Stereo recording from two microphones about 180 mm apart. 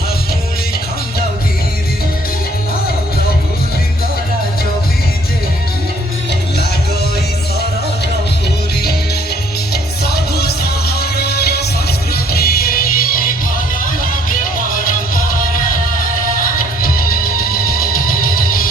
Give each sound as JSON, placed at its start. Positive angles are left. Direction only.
{"t": 10.3, "sound": "music", "side_deg": 60}